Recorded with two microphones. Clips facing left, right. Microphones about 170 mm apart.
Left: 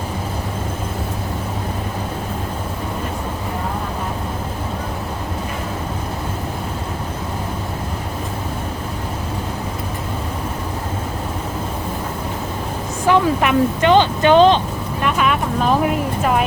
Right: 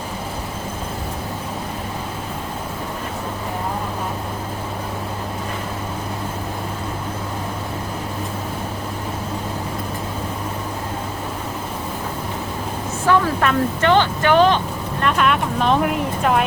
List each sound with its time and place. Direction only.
13.1 s speech: 15° left (ahead or behind)
15.0 s speech: 5° left (ahead or behind)